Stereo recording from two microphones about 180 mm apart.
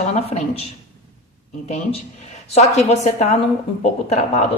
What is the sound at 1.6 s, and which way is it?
A woman's voice, 35° left (ahead or behind).